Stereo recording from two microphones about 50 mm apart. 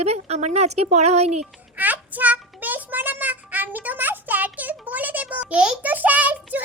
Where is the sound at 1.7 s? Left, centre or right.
Right.